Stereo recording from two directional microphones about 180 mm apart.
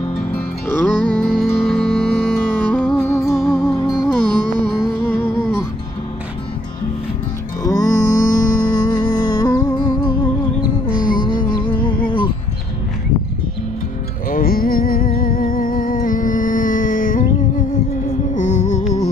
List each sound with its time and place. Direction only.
0.7 s music: 10° left (ahead or behind)
7.6 s music: 20° left (ahead or behind)
11.0 s music: 50° left (ahead or behind)
11.5 s music: 25° left (ahead or behind)
14.3 s music: 55° left (ahead or behind)
18.3 s music: 45° left (ahead or behind)